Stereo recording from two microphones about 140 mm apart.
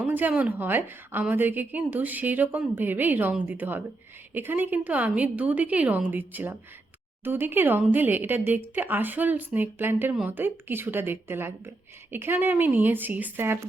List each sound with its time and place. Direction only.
0.0 s a woman's voice: 10° right (ahead or behind)